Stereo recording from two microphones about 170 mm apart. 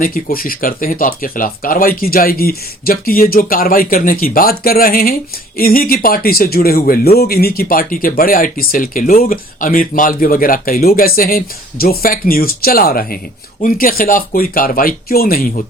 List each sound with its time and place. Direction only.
0.0 s speech: 60° left (ahead or behind)